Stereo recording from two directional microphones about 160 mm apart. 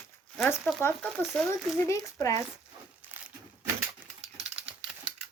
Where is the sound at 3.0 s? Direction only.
10° right (ahead or behind).